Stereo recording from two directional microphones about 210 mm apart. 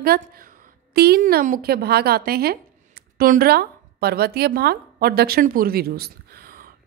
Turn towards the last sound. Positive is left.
turn(degrees=-45)  # may be behind; listen again after turning